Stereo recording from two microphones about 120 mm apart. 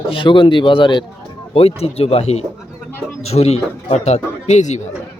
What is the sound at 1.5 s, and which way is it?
A man's voice, 55° left (ahead or behind).